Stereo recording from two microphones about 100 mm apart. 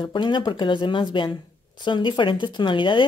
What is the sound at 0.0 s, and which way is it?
Speech, 50° left (ahead or behind).